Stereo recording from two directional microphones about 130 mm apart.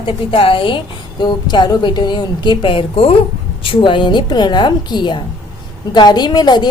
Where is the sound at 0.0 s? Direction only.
45° left (ahead or behind).